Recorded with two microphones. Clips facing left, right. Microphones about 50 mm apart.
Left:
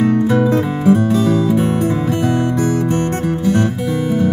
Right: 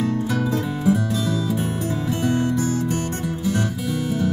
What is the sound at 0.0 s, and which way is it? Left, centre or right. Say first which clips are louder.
Music: left 9 dB; left.